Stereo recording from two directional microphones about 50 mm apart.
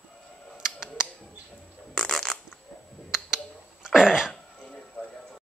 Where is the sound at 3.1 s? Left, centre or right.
Centre.